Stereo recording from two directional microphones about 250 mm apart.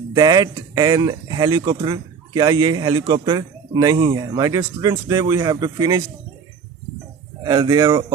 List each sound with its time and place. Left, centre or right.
0.1 s speech: centre
7.4 s speech: centre